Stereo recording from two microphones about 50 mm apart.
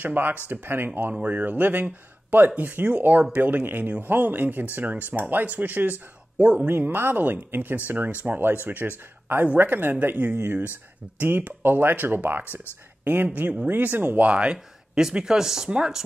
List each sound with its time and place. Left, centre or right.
0.0 s speech: right
1.2 s speech: right
6.9 s speech: right
14.3 s speech: centre